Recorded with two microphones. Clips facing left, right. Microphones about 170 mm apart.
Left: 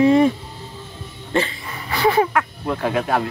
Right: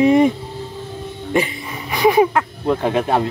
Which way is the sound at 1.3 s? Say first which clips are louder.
Right 2 dB; 15° right (ahead or behind).